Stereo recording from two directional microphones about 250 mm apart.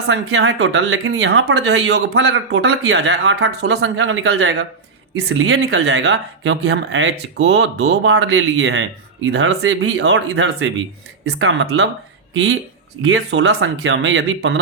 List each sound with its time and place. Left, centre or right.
0.1 s speech: right
13.0 s speech: right